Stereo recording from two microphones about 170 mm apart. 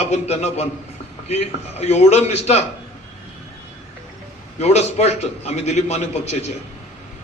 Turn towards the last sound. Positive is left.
turn(degrees=40)  # may be behind; listen again after turning